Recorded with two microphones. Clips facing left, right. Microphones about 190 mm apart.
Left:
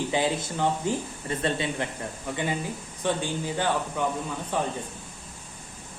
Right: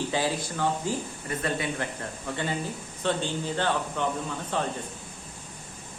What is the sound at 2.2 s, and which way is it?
Speech, 15° left (ahead or behind).